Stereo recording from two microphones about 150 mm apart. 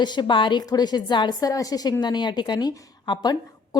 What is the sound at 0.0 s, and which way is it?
A woman's voice, 30° left (ahead or behind).